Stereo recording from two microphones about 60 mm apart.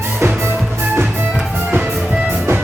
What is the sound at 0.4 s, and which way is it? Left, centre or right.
Music, right.